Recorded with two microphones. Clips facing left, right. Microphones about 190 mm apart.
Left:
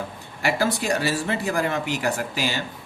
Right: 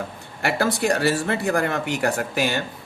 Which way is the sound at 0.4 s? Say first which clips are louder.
Right 2 dB; 60° right (ahead or behind).